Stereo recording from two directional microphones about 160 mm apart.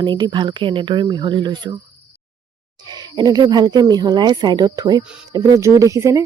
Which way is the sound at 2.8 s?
25° right (ahead or behind).